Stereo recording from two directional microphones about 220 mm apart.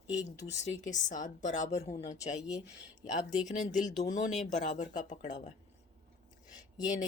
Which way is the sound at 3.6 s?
30° left (ahead or behind).